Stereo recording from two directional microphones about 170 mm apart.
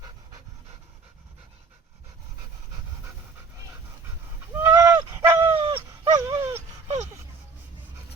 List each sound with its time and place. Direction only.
4.5 s dog: 15° right (ahead or behind)